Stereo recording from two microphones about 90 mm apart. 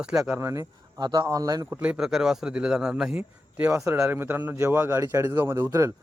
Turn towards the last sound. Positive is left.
turn(degrees=-35)  # may be behind; listen again after turning